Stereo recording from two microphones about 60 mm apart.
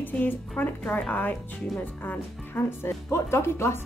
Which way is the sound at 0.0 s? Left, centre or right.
Left.